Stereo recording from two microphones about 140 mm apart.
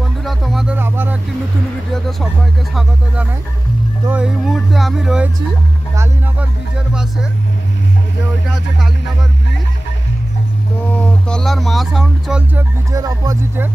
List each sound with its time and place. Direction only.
0.2 s music: centre (ahead or behind)
0.7 s vehicle: 15° right (ahead or behind)
4.1 s speech: 5° right (ahead or behind)
6.9 s speech: 5° right (ahead or behind)
11.0 s a sound: 5° left (ahead or behind)
12.9 s speech: 25° right (ahead or behind)